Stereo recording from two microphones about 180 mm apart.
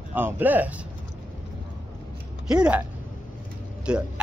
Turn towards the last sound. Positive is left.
turn(degrees=-5)  # may be behind; listen again after turning